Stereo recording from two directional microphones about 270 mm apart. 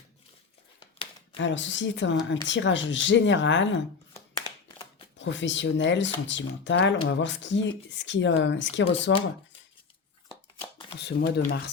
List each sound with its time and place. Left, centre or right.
0.8 s crumpling: centre
1.4 s speech: left
4.1 s a sound: centre
5.1 s speech: left
10.9 s speech: left